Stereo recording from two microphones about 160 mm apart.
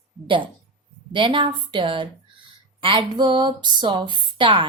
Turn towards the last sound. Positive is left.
turn(degrees=-30)  # may be behind; listen again after turning